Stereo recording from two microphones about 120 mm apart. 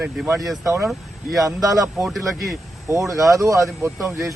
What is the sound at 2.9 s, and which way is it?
Speech, 25° right (ahead or behind).